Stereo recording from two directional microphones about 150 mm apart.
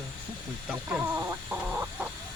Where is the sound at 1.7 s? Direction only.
10° right (ahead or behind).